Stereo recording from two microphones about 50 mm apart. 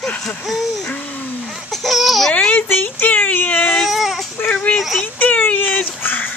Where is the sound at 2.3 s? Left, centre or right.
Left.